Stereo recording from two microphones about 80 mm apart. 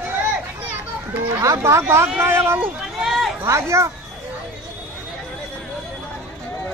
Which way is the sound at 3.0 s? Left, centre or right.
Centre.